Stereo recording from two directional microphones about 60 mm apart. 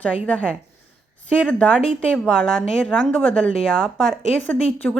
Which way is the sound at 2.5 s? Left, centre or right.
Centre.